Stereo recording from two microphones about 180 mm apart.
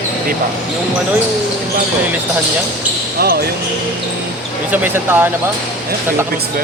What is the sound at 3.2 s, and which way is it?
Speech, 60° right (ahead or behind).